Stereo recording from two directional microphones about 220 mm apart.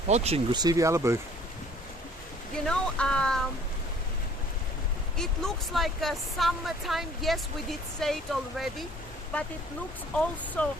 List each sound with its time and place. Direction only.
0.1 s speech: 30° right (ahead or behind); by 1.2 s 10° right (ahead or behind)
2.6 s speech: 5° left (ahead or behind)
5.1 s speech: centre (ahead or behind)
10.2 s speech: 5° left (ahead or behind)